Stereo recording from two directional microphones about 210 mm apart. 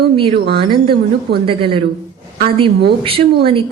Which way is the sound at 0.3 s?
50° right (ahead or behind).